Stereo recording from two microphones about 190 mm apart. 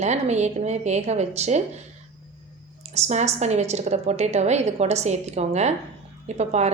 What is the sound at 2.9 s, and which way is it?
A woman's voice, 35° right (ahead or behind).